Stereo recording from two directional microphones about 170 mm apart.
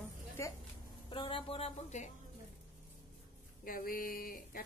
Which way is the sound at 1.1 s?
30° left (ahead or behind).